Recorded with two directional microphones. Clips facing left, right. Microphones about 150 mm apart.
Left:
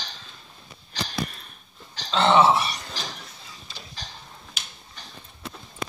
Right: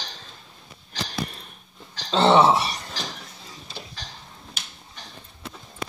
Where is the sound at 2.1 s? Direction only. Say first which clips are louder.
Right 1 dB; 35° right (ahead or behind).